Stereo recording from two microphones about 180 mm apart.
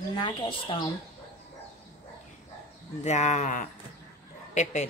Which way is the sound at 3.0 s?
40° left (ahead or behind).